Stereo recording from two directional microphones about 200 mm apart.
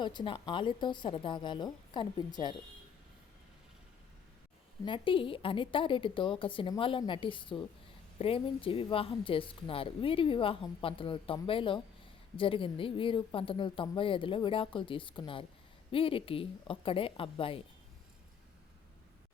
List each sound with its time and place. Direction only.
0.0 s speech: 25° left (ahead or behind)
4.9 s speech: 25° left (ahead or behind)